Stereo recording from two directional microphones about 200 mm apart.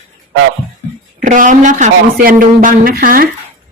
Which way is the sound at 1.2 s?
40° right (ahead or behind).